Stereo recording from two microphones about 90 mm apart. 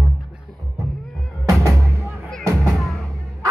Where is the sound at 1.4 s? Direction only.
35° right (ahead or behind).